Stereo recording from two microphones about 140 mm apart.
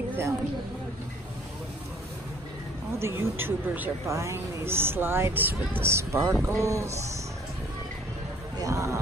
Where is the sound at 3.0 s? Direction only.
20° right (ahead or behind).